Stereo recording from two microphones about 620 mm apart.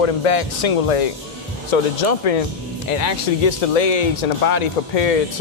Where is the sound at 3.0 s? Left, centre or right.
Left.